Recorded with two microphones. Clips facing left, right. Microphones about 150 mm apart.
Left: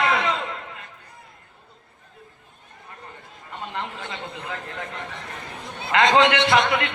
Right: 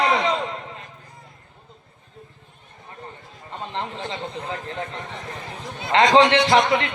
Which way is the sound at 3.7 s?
25° right (ahead or behind).